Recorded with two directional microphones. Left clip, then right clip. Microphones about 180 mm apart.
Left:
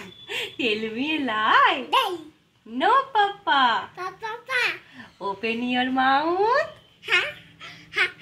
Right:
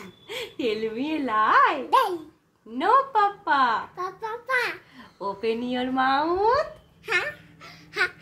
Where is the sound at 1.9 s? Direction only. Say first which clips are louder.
Right 1 dB; 15° right (ahead or behind).